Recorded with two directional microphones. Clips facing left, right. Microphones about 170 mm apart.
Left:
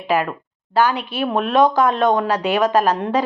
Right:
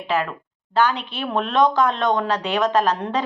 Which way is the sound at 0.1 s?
10° left (ahead or behind).